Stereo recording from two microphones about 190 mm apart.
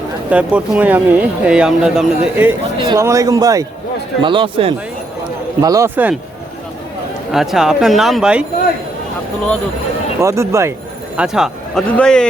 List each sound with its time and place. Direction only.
0.3 s speech: 5° right (ahead or behind)
2.7 s a man's voice: 20° right (ahead or behind)
5.6 s speech: 15° right (ahead or behind)
7.3 s speech: centre (ahead or behind)
10.2 s speech: 15° right (ahead or behind)
11.2 s speech: 5° right (ahead or behind)